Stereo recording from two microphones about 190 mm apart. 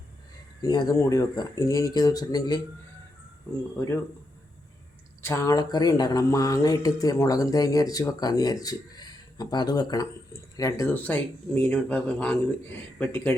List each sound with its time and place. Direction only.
0.6 s speech: 20° left (ahead or behind)
3.5 s speech: 10° left (ahead or behind)
5.2 s speech: 15° left (ahead or behind)